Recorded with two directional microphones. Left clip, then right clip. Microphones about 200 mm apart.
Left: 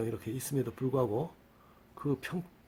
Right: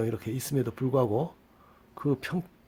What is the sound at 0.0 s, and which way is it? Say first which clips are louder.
Speech: right 5 dB; 40° right (ahead or behind).